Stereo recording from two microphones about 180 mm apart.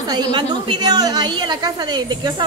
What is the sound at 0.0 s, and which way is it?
A woman's voice, 25° right (ahead or behind).